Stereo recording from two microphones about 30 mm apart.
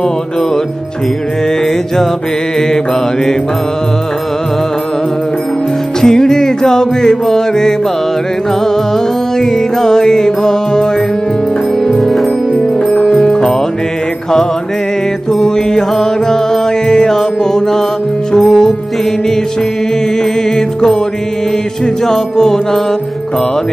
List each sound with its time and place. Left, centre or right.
5.9 s music: centre
9.4 s music: centre
11.9 s music: centre
12.9 s music: centre
15.4 s mantra: centre
16.8 s music: centre
18.4 s music: centre
20.5 s music: centre
22.0 s music: centre